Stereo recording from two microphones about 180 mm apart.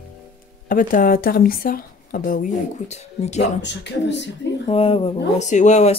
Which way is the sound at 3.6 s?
75° left (ahead or behind).